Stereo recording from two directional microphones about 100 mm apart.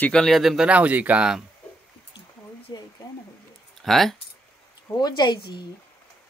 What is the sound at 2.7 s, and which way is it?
Speech, 45° left (ahead or behind).